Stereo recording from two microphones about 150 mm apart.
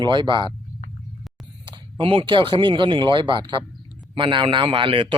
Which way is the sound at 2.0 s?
35° right (ahead or behind).